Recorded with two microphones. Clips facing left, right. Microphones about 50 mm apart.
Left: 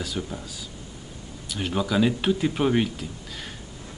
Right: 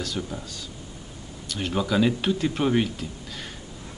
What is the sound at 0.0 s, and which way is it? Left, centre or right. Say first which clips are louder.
Speech: even; centre.